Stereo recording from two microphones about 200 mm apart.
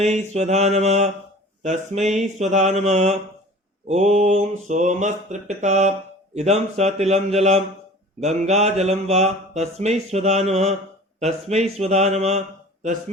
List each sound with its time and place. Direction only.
0.0 s mantra: 35° right (ahead or behind)